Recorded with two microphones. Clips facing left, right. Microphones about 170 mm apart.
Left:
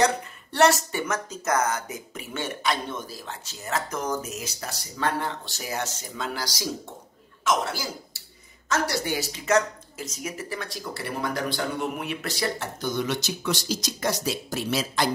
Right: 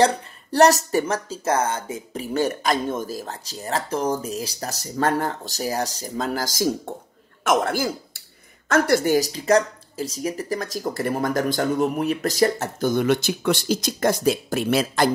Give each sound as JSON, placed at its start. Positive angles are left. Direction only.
{"t": 0.0, "sound": "speech", "side_deg": -40}